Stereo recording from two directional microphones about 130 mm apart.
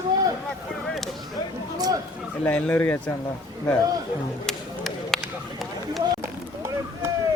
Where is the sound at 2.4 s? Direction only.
10° left (ahead or behind).